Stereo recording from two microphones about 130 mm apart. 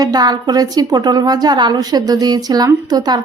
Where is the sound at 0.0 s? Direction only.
30° right (ahead or behind).